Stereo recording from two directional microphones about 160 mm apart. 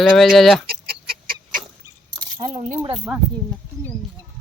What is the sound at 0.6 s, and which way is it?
Chicken, 70° right (ahead or behind).